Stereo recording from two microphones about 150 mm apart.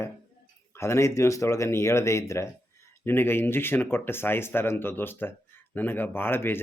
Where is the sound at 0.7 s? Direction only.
20° left (ahead or behind).